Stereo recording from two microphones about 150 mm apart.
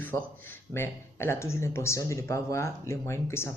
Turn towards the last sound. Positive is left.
turn(degrees=15)  # may be behind; listen again after turning